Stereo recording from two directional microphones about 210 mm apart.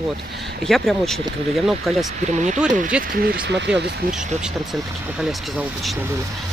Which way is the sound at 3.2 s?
55° right (ahead or behind).